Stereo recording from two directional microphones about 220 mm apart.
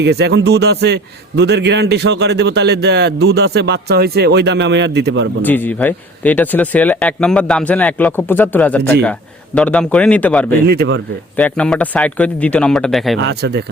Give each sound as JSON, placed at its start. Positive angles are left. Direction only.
{"t": 0.0, "sound": "a man's voice", "side_deg": -50}
{"t": 5.4, "sound": "speech", "side_deg": 10}
{"t": 10.7, "sound": "a man's voice", "side_deg": -55}
{"t": 11.3, "sound": "speech", "side_deg": 5}
{"t": 13.1, "sound": "a man's voice", "side_deg": -50}